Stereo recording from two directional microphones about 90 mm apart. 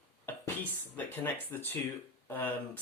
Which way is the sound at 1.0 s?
20° left (ahead or behind).